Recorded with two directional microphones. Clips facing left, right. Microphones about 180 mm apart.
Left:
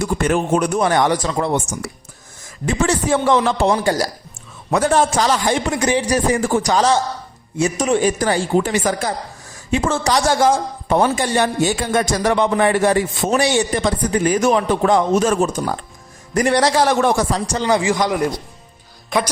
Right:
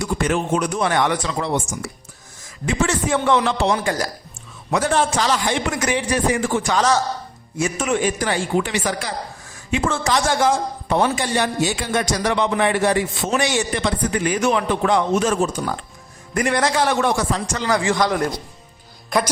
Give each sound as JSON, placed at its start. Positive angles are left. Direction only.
{"t": 0.0, "sound": "speech", "side_deg": 50}
{"t": 2.6, "sound": "a man's voice", "side_deg": 35}
{"t": 4.7, "sound": "a man's voice", "side_deg": 45}